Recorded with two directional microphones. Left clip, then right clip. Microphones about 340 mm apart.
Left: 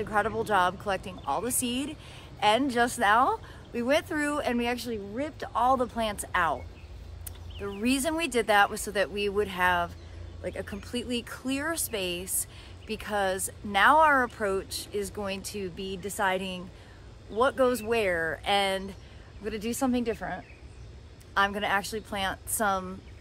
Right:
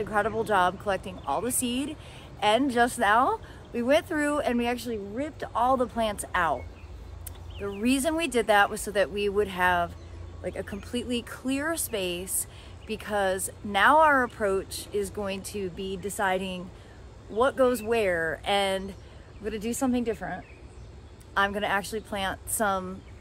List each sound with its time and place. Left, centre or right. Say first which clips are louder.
0.0 s speech: right 1 dB; centre
7.8 s speech: right 2 dB; centre